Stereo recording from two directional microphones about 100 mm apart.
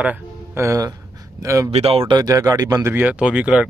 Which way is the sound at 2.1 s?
40° right (ahead or behind).